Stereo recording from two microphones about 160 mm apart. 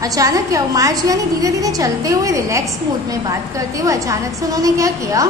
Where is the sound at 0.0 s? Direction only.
20° right (ahead or behind).